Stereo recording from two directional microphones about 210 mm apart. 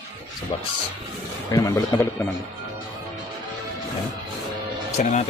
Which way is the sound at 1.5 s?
15° left (ahead or behind).